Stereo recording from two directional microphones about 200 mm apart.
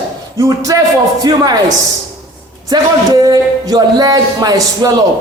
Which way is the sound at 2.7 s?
20° right (ahead or behind).